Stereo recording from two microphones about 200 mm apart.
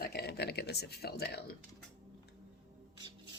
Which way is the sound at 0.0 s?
55° left (ahead or behind).